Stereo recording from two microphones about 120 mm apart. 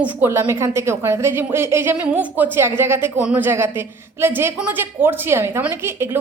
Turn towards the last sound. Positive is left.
turn(degrees=-20)  # may be behind; listen again after turning